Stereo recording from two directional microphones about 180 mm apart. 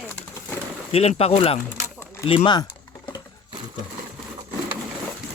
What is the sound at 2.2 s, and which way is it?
Typing, 25° left (ahead or behind).